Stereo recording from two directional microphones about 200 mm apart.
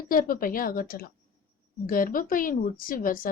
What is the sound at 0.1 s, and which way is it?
Speech, 45° left (ahead or behind).